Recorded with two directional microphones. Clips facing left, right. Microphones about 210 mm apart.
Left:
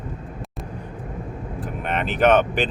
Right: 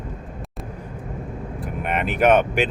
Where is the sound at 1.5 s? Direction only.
10° right (ahead or behind).